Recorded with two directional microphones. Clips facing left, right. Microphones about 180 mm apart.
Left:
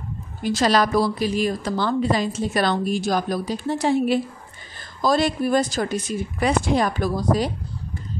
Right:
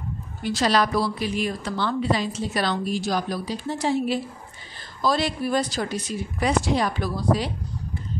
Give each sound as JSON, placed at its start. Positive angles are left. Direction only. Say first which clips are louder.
{"t": 0.4, "sound": "a woman's voice", "louder": "left 3 dB", "side_deg": 45}
{"t": 5.0, "sound": "a woman's voice", "louder": "left 4 dB", "side_deg": 45}